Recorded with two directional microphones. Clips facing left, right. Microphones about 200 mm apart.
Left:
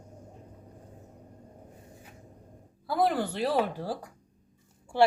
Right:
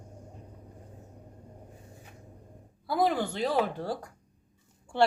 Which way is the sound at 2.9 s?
Centre (ahead or behind).